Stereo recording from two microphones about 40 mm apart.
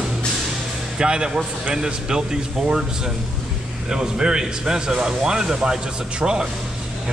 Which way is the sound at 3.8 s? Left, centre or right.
Centre.